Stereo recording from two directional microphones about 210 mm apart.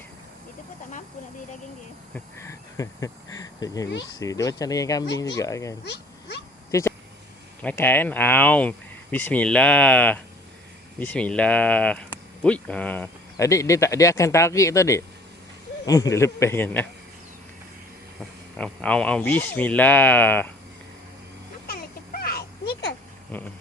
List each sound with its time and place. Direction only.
2.1 s speech: 15° left (ahead or behind)
5.8 s speech: 55° left (ahead or behind)
6.7 s a sound: 15° left (ahead or behind)
7.6 s speech: 10° left (ahead or behind)
18.5 s speech: 5° left (ahead or behind)
21.7 s a sound: 45° left (ahead or behind)